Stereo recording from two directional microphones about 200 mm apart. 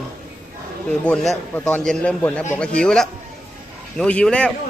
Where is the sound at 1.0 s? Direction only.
Centre (ahead or behind).